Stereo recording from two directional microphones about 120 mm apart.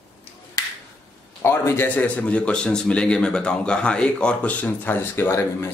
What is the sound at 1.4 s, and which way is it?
A man's voice, 20° left (ahead or behind).